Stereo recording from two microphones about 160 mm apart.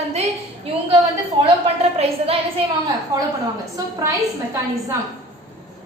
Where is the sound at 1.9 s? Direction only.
40° right (ahead or behind).